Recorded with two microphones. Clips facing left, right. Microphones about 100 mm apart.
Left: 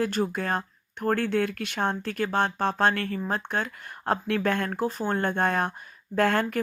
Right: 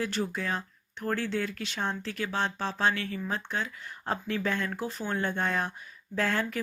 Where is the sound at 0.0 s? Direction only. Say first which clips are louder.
Left 5 dB; 50° left (ahead or behind).